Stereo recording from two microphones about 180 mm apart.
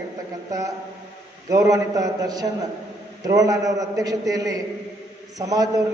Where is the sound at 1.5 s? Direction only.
20° right (ahead or behind).